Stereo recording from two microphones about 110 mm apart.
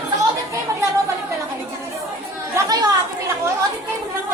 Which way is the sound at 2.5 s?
35° right (ahead or behind).